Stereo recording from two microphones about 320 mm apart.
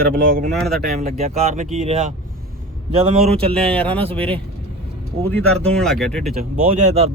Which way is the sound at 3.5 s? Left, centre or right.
Centre.